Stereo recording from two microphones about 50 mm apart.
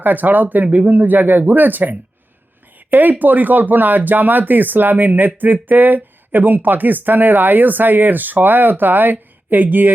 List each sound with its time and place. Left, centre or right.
0.0 s speech: right